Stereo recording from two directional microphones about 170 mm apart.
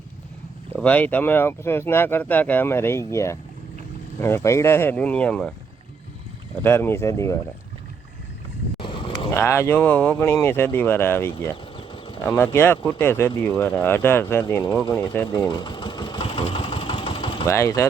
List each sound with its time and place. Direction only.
0.8 s speech: 10° left (ahead or behind)
6.6 s speech: 15° left (ahead or behind)
8.8 s vehicle: 30° left (ahead or behind)
9.3 s speech: 15° left (ahead or behind)
11.8 s a sound: 30° left (ahead or behind)
12.4 s speech: 15° left (ahead or behind)
15.3 s engine: 25° left (ahead or behind)
17.5 s speech: 15° left (ahead or behind)